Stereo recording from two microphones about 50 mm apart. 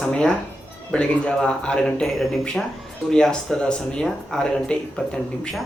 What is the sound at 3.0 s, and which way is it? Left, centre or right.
Speech, centre.